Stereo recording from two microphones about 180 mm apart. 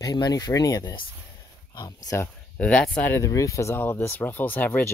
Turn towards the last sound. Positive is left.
turn(degrees=10)  # may be behind; listen again after turning